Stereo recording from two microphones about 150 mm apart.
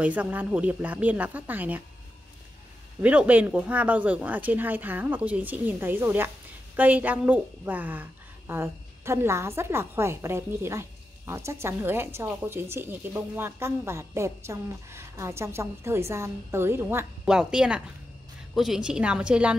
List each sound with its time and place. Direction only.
0.0 s a woman's voice: 10° right (ahead or behind)
3.0 s a woman's voice: 10° right (ahead or behind)
17.3 s a woman's voice: 5° right (ahead or behind)